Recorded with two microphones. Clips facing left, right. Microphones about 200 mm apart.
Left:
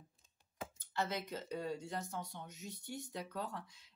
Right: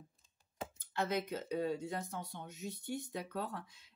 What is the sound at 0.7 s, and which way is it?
Speech, 55° right (ahead or behind).